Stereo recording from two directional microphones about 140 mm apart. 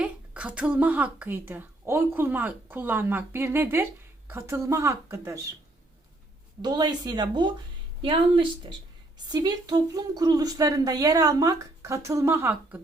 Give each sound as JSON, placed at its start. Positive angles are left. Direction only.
{"t": 0.0, "sound": "a woman's voice", "side_deg": -10}
{"t": 6.6, "sound": "a woman's voice", "side_deg": -30}